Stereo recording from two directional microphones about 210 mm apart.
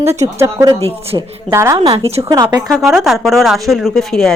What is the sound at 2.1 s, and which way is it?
Speech, 30° right (ahead or behind).